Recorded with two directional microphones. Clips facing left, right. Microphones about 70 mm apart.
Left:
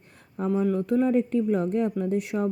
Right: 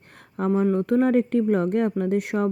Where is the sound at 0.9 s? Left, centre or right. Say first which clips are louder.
Right 3 dB; right.